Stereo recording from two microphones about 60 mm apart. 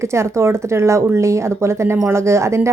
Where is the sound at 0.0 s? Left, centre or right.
Right.